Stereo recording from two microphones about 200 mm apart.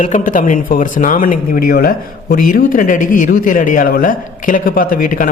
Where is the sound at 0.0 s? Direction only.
40° left (ahead or behind).